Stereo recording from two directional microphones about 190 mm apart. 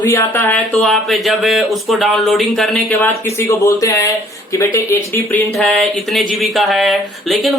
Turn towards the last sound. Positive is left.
turn(degrees=0)  # may be behind; listen again after turning